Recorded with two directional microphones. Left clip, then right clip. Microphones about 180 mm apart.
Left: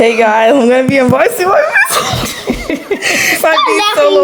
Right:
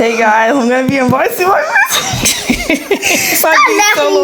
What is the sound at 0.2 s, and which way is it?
Speech, 20° left (ahead or behind).